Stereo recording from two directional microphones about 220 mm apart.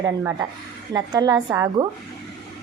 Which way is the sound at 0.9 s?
20° right (ahead or behind).